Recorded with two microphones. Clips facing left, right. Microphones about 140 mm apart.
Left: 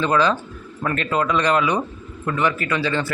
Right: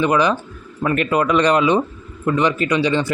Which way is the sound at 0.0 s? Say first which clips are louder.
Right 2 dB; 15° right (ahead or behind).